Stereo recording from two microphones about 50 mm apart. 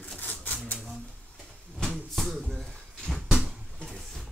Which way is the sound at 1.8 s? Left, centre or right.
Centre.